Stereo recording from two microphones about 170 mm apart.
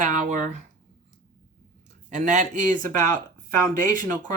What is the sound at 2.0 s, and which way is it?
Speech, 45° right (ahead or behind).